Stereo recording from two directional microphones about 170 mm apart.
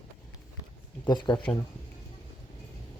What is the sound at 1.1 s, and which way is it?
Speech, 25° left (ahead or behind).